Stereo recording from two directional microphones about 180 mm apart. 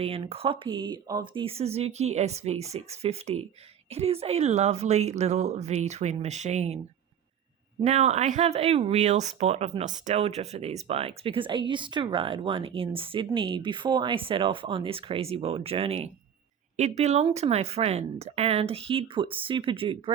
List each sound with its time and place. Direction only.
0.0 s speech: 35° right (ahead or behind)
7.9 s speech: 40° right (ahead or behind)